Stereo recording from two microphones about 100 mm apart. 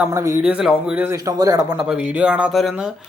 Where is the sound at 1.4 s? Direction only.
35° right (ahead or behind).